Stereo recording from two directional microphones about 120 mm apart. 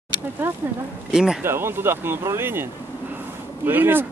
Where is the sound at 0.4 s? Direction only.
15° right (ahead or behind).